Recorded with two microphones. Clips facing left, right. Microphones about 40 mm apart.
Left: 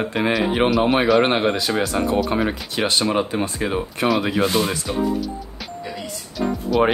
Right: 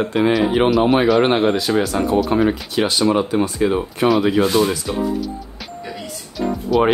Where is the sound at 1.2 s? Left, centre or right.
Left.